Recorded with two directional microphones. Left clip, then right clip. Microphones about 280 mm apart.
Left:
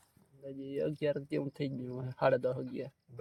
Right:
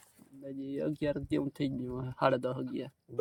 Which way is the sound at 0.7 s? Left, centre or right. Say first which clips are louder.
Even; centre.